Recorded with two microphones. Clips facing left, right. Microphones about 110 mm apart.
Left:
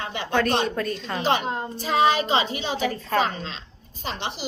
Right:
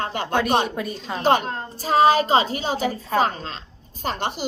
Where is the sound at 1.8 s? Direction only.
40° right (ahead or behind).